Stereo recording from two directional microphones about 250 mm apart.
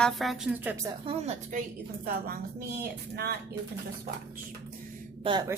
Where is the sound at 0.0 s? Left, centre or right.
Centre.